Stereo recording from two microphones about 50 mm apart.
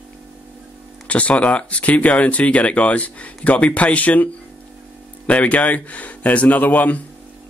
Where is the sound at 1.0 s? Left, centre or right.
Left.